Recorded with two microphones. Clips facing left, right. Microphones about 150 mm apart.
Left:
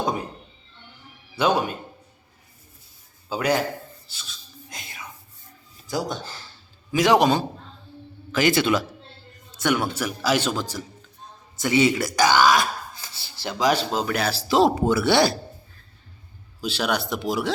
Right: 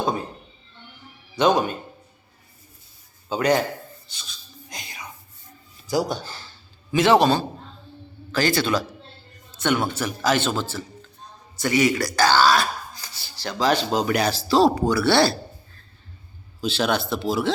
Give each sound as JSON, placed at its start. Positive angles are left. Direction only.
{"t": 1.4, "sound": "a man's voice", "side_deg": 5}
{"t": 3.2, "sound": "a man's voice", "side_deg": 5}
{"t": 4.0, "sound": "a sound", "side_deg": 5}
{"t": 5.9, "sound": "speech", "side_deg": 0}
{"t": 6.9, "sound": "a man's voice", "side_deg": 10}
{"t": 9.6, "sound": "a man's voice", "side_deg": 10}
{"t": 11.6, "sound": "a sound", "side_deg": 20}
{"t": 13.9, "sound": "speech", "side_deg": 0}
{"t": 14.4, "sound": "speech", "side_deg": 20}
{"t": 16.6, "sound": "a man's voice", "side_deg": 10}